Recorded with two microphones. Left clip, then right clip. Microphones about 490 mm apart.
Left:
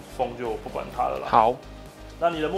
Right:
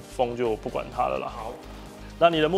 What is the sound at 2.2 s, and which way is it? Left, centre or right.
Speech, right.